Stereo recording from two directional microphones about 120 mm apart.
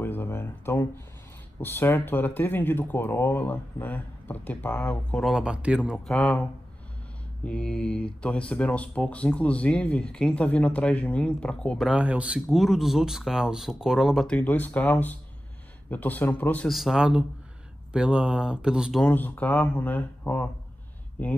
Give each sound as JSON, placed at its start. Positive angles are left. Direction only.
{"t": 0.0, "sound": "a sound", "side_deg": 15}
{"t": 1.6, "sound": "speech", "side_deg": 15}
{"t": 5.2, "sound": "speech", "side_deg": -5}
{"t": 6.0, "sound": "speech", "side_deg": 10}
{"t": 7.4, "sound": "speech", "side_deg": 10}
{"t": 11.9, "sound": "speech", "side_deg": -10}
{"t": 14.2, "sound": "speech", "side_deg": 10}
{"t": 16.6, "sound": "speech", "side_deg": 0}
{"t": 18.9, "sound": "speech", "side_deg": 15}